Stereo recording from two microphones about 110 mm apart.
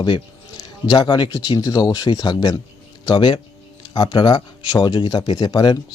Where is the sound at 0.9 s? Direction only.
45° left (ahead or behind).